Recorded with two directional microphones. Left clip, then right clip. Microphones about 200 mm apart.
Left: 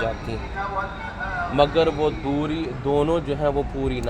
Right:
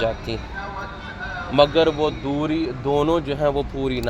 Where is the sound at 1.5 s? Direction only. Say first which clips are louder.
Right 3 dB; 50° right (ahead or behind).